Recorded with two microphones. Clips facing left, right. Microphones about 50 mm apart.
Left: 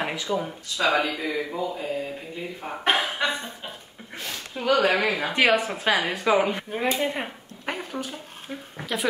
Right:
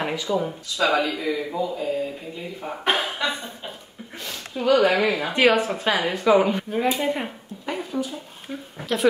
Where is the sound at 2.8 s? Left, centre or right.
Centre.